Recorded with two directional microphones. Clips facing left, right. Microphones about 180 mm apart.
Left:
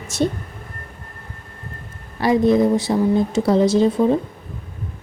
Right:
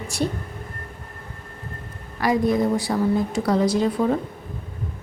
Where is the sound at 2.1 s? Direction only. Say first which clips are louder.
Left 5 dB; 25° left (ahead or behind).